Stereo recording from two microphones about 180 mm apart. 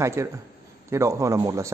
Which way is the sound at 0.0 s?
15° right (ahead or behind).